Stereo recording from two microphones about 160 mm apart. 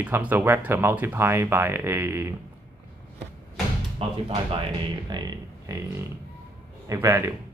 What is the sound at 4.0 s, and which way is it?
Speech, 35° right (ahead or behind).